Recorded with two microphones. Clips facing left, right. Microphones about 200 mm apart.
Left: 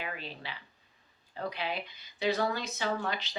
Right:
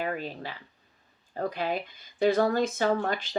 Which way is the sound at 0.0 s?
45° right (ahead or behind).